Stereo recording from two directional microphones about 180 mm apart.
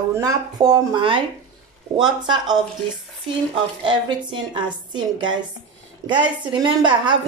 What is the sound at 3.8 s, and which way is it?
A woman's voice, 25° right (ahead or behind).